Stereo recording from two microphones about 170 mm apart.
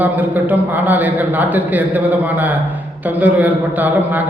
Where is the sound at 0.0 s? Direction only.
10° right (ahead or behind).